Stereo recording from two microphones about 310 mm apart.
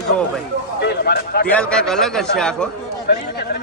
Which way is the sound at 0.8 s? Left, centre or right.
Left.